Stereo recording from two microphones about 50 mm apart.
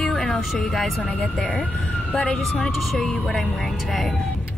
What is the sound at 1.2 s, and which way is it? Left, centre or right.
Speech, left.